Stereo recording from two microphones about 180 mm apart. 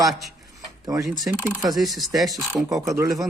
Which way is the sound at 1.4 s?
Centre (ahead or behind).